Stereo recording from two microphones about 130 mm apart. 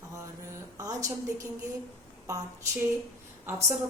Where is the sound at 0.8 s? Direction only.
25° right (ahead or behind).